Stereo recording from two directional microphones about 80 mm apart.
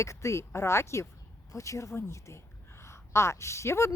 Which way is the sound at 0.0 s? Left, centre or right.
Left.